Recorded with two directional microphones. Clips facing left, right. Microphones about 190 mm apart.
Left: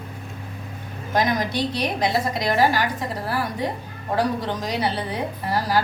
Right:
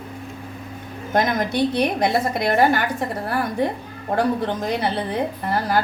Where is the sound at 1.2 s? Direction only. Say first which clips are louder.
Right 2 dB; 55° right (ahead or behind).